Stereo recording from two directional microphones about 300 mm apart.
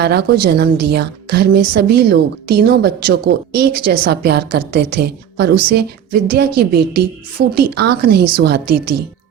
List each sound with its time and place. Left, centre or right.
0.0 s a woman's voice: right